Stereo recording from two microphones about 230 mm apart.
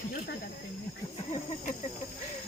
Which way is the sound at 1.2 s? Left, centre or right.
Left.